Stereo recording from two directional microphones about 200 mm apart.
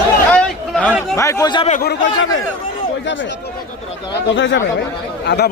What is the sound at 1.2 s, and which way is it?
Speech, 15° left (ahead or behind).